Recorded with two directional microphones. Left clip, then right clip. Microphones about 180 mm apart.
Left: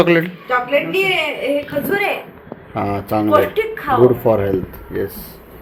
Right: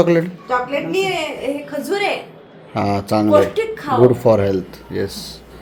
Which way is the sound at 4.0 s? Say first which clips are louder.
Right 1 dB; 10° right (ahead or behind).